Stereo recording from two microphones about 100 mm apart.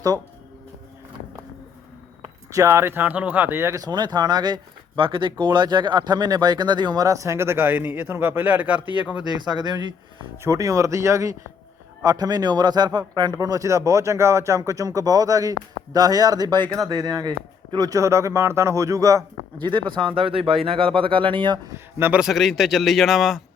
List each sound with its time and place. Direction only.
2.5 s speech: 30° right (ahead or behind)
3.8 s speech: 45° right (ahead or behind); by 8.8 s 15° right (ahead or behind)
9.2 s speech: 45° right (ahead or behind)
10.4 s speech: 35° right (ahead or behind)
19.5 s speech: 55° right (ahead or behind)
21.9 s speech: 20° right (ahead or behind)
22.2 s a man's voice: centre (ahead or behind)